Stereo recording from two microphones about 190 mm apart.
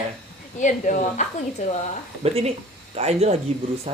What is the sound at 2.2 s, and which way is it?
Speech, 35° right (ahead or behind).